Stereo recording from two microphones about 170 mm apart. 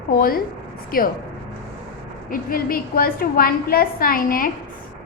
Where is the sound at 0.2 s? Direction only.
60° left (ahead or behind).